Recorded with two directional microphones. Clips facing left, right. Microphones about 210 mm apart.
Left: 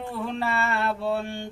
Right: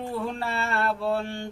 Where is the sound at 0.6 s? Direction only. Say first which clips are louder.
Even; centre (ahead or behind).